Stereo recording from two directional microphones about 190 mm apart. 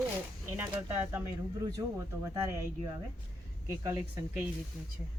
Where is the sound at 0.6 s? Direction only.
10° right (ahead or behind).